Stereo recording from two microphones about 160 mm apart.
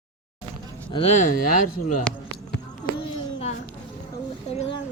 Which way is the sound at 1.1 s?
55° left (ahead or behind).